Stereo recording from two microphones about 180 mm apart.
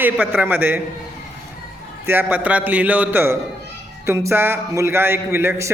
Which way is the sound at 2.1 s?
10° right (ahead or behind).